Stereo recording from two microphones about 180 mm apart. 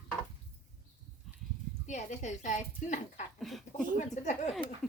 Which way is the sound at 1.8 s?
40° left (ahead or behind).